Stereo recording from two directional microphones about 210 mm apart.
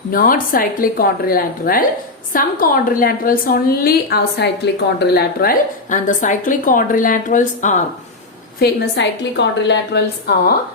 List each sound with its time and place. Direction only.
0.1 s a woman's voice: 40° left (ahead or behind)
8.5 s a woman's voice: 50° left (ahead or behind)